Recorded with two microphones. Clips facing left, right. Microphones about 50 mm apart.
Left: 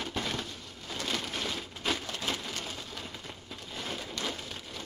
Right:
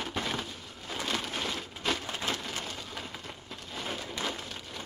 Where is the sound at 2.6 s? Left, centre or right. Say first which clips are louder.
Right 1 dB; centre.